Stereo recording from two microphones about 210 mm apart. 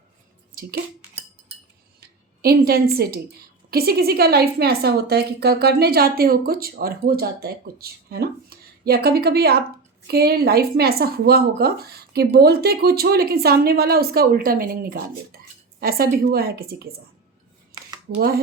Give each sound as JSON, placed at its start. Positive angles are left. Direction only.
{"t": 0.6, "sound": "speech", "side_deg": -45}
{"t": 2.0, "sound": "a woman's voice", "side_deg": -45}